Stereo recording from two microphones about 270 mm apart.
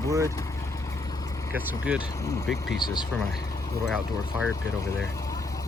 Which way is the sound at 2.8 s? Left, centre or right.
Centre.